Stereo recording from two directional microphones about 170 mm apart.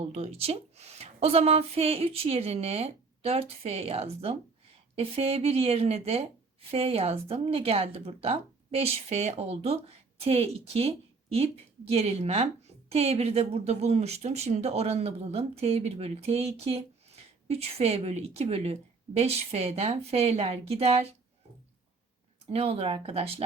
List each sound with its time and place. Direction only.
0.0 s speech: 40° right (ahead or behind)
22.4 s speech: 35° right (ahead or behind)